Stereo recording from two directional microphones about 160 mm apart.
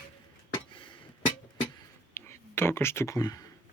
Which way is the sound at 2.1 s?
15° left (ahead or behind).